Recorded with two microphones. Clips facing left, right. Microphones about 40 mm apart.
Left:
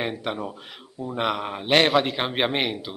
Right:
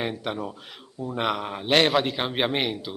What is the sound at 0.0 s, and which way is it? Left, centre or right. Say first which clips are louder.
Speech: left 1 dB; centre.